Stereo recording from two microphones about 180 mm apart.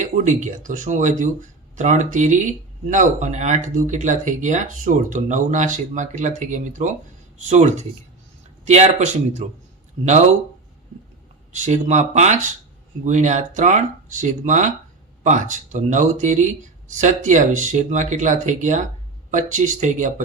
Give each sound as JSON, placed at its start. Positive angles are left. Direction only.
{"t": 0.0, "sound": "speech", "side_deg": -45}
{"t": 11.5, "sound": "speech", "side_deg": -40}